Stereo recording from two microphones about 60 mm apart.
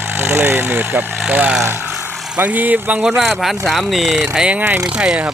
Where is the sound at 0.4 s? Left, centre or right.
Right.